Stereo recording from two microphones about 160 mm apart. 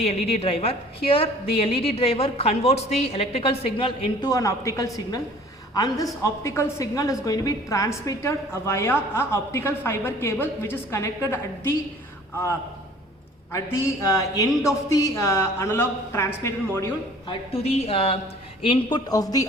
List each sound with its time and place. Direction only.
0.0 s a woman's voice: 40° left (ahead or behind); by 11.8 s 15° left (ahead or behind)
13.5 s a man's voice: 15° left (ahead or behind)
17.2 s a woman's voice: 40° left (ahead or behind); by 19.5 s 25° left (ahead or behind)